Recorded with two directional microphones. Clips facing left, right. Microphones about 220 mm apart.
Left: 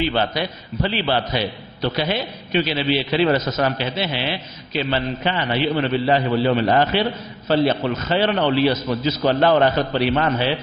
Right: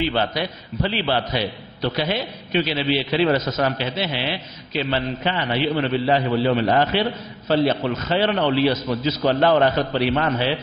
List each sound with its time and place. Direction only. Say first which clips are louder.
0.0 s a man's voice: left 1 dB; 10° left (ahead or behind)
3.3 s a man's voice: left 1 dB; 20° left (ahead or behind)
3.7 s a man's voice: left 1 dB; 10° left (ahead or behind)